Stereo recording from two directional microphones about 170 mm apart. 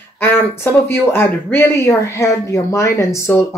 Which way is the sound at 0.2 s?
15° left (ahead or behind).